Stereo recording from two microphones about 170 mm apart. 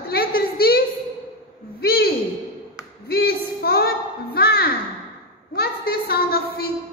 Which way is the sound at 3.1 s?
70° left (ahead or behind).